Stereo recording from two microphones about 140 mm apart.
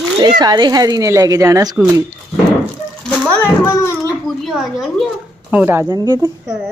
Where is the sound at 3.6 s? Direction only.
20° left (ahead or behind).